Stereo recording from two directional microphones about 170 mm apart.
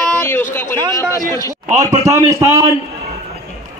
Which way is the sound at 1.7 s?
20° right (ahead or behind).